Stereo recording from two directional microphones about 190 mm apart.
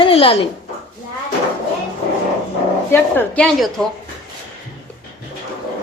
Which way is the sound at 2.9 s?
10° left (ahead or behind).